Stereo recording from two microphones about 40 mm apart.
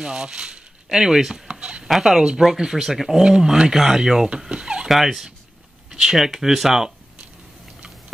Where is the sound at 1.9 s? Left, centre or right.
Centre.